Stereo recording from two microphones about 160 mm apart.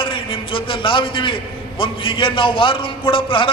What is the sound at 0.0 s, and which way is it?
A man's voice, 35° left (ahead or behind).